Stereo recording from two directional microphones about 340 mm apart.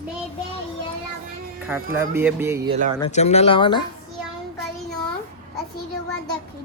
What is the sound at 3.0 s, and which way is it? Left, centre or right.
Speech, centre.